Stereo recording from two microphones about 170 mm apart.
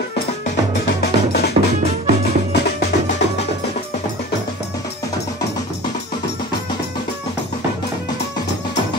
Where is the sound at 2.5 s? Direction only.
85° left.